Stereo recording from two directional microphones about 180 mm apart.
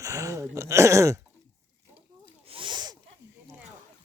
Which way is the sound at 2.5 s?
25° right (ahead or behind).